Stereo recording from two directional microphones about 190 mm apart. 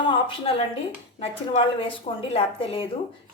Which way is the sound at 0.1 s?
25° left (ahead or behind).